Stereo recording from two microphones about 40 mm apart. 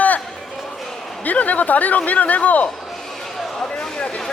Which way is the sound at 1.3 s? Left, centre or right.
Left.